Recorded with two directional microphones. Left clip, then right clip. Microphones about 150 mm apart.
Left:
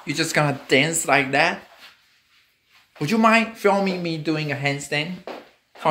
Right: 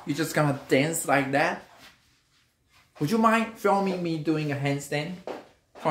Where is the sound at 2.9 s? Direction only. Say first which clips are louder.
Left 5 dB; 10° left (ahead or behind).